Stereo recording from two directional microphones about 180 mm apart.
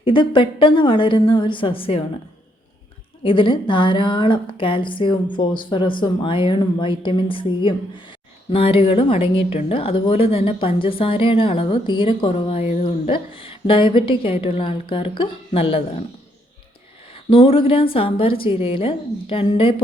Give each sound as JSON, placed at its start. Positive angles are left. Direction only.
{"t": 0.0, "sound": "a woman's voice", "side_deg": 25}
{"t": 3.2, "sound": "a woman's voice", "side_deg": 30}
{"t": 17.2, "sound": "a woman's voice", "side_deg": 30}